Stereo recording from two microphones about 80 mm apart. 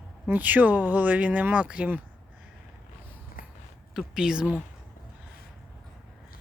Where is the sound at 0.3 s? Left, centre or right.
Right.